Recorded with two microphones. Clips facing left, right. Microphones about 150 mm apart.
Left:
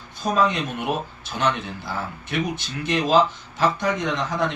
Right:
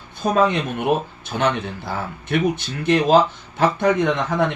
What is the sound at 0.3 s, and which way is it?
Speech, 55° right (ahead or behind).